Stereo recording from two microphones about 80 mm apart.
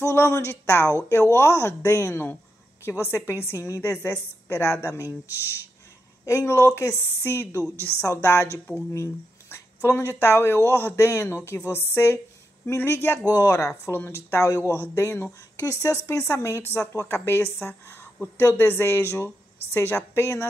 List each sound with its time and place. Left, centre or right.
0.0 s speech: left
6.2 s speech: left
13.3 s speech: left
13.9 s speech: left